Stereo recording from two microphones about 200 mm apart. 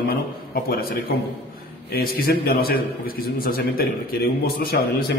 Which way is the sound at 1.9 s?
50° left (ahead or behind).